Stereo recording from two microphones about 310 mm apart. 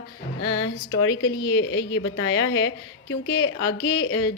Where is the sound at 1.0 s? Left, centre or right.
Left.